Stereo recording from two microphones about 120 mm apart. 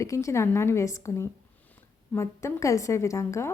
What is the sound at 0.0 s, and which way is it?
A woman's voice, 25° left (ahead or behind).